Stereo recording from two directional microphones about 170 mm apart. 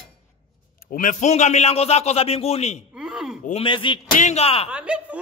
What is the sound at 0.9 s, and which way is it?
A man's voice, 50° left (ahead or behind).